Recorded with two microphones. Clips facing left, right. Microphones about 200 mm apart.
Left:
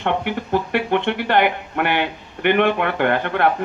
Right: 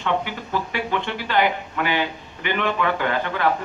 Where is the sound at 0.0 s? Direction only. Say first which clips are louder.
Left 3 dB; 60° left (ahead or behind).